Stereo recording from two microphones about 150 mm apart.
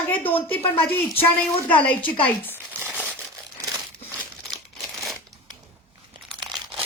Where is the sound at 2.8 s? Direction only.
5° right (ahead or behind).